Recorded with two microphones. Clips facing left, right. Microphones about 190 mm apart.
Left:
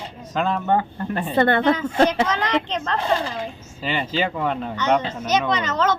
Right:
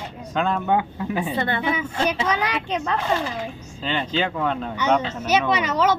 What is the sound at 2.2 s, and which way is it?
Speech, 10° right (ahead or behind).